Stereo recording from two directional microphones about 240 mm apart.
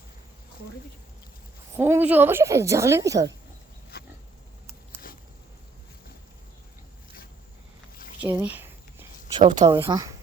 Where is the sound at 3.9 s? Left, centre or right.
Left.